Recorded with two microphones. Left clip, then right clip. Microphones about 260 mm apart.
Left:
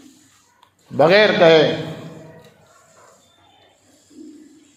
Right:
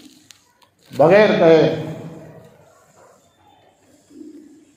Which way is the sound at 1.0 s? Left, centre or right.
Left.